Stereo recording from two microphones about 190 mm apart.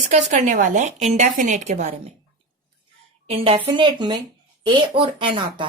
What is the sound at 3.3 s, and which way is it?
A woman's voice, 30° right (ahead or behind).